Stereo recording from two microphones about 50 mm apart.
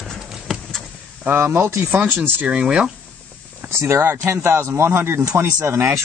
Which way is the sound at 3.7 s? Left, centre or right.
Right.